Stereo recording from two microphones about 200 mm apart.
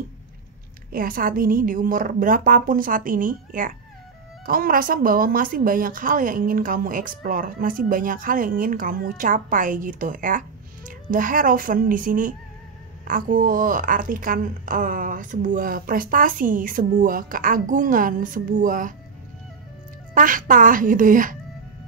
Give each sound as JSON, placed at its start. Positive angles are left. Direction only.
{"t": 0.9, "sound": "a woman's voice", "side_deg": -45}
{"t": 20.2, "sound": "a woman's voice", "side_deg": -40}